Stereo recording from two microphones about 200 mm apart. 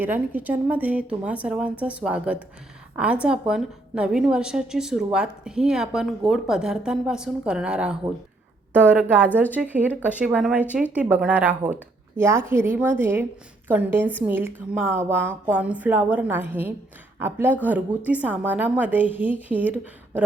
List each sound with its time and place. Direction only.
0.0 s a woman's voice: 10° right (ahead or behind)